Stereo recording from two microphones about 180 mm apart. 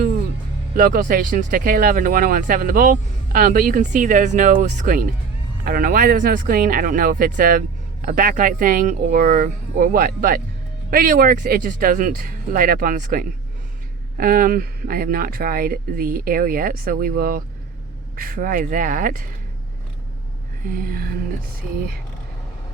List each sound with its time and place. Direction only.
0.8 s speech: 50° right (ahead or behind)
20.7 s speech: 50° right (ahead or behind)